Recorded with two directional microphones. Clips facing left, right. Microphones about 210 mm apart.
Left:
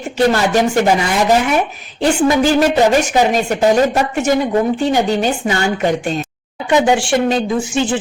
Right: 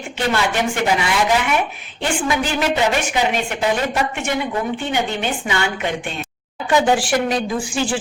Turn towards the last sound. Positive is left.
turn(degrees=20)  # may be behind; listen again after turning